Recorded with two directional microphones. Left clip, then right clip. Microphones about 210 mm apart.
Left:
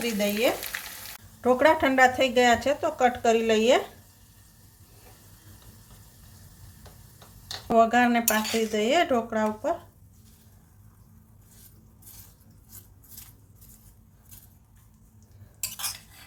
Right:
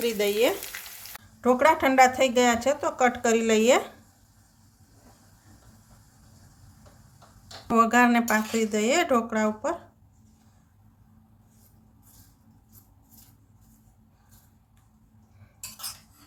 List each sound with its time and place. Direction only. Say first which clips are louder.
0.0 s stir: right 2 dB; 40° right (ahead or behind)
0.7 s frying: left 4 dB; 10° left (ahead or behind)
1.4 s speech: even; 5° right (ahead or behind)
7.8 s speech: even; 15° right (ahead or behind)